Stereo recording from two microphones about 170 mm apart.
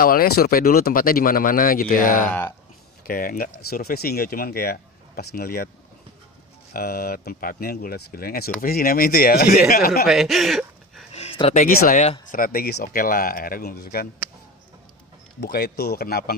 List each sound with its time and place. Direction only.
0.0 s speech: 60° left (ahead or behind)
6.7 s speech: 60° left (ahead or behind)
10.0 s speech: centre (ahead or behind)
11.1 s a sound: 35° left (ahead or behind)
11.6 s speech: 55° left (ahead or behind)
15.4 s speech: 70° left (ahead or behind)